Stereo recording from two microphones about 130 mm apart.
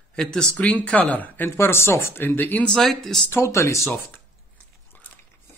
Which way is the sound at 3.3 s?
20° left (ahead or behind).